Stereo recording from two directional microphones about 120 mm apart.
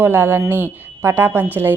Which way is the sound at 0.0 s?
20° right (ahead or behind).